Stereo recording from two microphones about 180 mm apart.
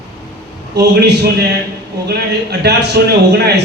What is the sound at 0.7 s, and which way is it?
A man's voice, 65° right (ahead or behind).